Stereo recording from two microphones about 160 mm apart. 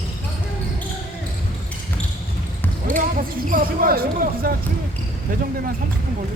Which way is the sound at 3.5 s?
60° right (ahead or behind).